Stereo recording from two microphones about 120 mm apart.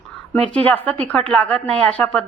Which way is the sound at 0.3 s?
10° left (ahead or behind).